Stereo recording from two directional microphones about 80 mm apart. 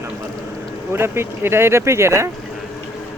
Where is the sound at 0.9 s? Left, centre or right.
Right.